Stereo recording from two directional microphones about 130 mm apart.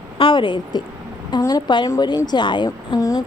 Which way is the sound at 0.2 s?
40° left (ahead or behind).